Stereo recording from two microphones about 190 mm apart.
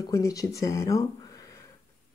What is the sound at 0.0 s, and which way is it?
Speech, 15° left (ahead or behind).